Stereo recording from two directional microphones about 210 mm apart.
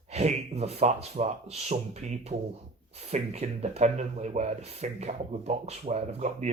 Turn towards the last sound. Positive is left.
turn(degrees=-30)  # may be behind; listen again after turning